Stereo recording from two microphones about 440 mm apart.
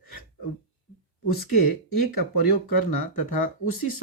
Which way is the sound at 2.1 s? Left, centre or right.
Left.